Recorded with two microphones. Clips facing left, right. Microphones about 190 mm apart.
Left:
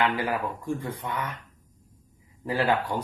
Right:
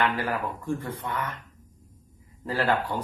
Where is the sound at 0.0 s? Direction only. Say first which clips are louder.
Left 1 dB; 15° left (ahead or behind).